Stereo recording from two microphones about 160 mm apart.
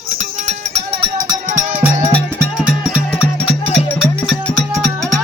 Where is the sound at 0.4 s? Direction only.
40° right (ahead or behind).